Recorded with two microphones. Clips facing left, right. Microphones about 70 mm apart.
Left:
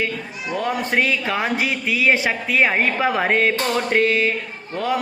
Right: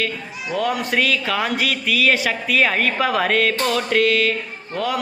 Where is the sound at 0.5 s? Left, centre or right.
Left.